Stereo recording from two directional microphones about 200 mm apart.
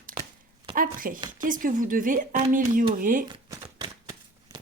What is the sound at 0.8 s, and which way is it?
A woman's voice, 45° right (ahead or behind).